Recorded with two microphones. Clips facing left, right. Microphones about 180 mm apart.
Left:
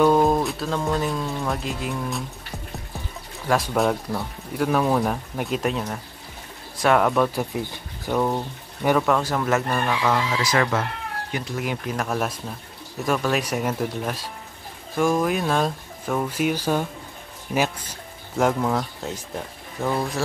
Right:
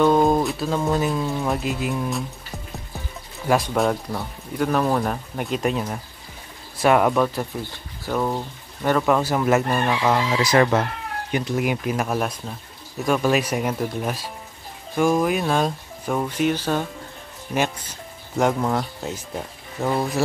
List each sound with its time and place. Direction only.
0.0 s speech: 5° left (ahead or behind)
3.4 s speech: centre (ahead or behind)
7.3 s speech: 15° left (ahead or behind)
8.1 s speech: 5° left (ahead or behind)
9.1 s speech: 10° right (ahead or behind)
13.0 s speech: centre (ahead or behind)
16.3 s speech: 10° left (ahead or behind)
18.4 s speech: 5° right (ahead or behind)
19.8 s speech: 15° right (ahead or behind)